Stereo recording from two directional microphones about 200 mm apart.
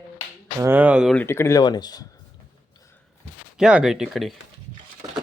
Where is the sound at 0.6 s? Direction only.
10° right (ahead or behind).